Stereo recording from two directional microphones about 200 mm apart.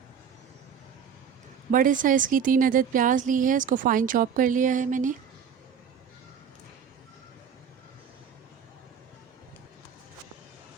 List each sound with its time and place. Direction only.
1.7 s a woman's voice: 40° right (ahead or behind)